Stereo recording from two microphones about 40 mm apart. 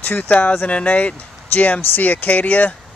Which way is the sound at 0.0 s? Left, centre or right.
Left.